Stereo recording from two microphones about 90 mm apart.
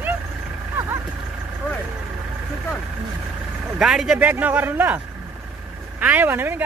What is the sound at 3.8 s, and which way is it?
Speech, 5° right (ahead or behind).